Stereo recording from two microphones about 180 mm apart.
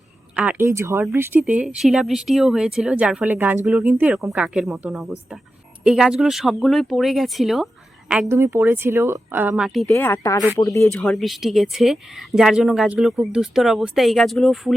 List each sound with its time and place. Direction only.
0.3 s speech: 10° right (ahead or behind)
9.9 s speech: 15° left (ahead or behind)
10.9 s speech: 5° left (ahead or behind)